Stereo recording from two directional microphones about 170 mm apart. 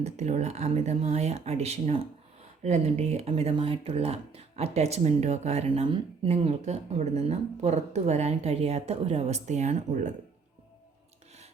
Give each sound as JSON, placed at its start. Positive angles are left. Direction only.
{"t": 0.0, "sound": "speech", "side_deg": -40}